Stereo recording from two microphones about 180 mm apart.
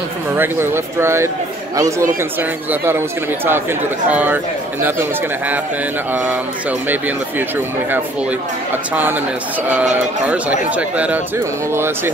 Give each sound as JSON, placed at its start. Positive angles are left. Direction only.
{"t": 0.4, "sound": "speech", "side_deg": -15}
{"t": 6.9, "sound": "speech", "side_deg": -10}
{"t": 8.9, "sound": "speech", "side_deg": -10}
{"t": 10.2, "sound": "speech", "side_deg": -5}